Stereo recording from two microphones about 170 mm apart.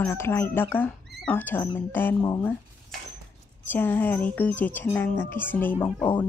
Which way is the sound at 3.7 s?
10° left (ahead or behind).